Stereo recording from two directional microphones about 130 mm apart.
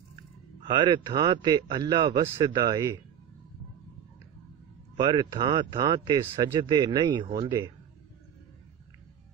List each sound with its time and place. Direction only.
0.7 s speech: 35° right (ahead or behind)
4.9 s speech: 35° right (ahead or behind)